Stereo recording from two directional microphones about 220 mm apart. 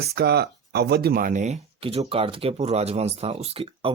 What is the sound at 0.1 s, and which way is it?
Speech, 45° right (ahead or behind).